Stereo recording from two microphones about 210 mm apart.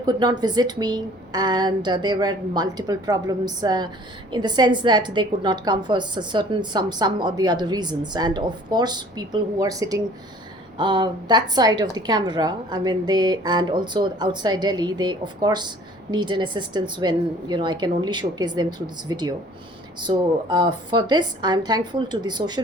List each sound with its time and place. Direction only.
0.0 s a woman's voice: 20° right (ahead or behind)